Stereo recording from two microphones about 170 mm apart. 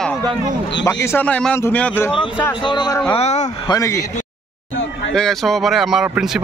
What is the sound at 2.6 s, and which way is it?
Speech, 25° left (ahead or behind).